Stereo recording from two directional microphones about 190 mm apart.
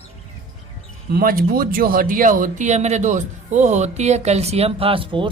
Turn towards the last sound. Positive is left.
turn(degrees=-25)  # may be behind; listen again after turning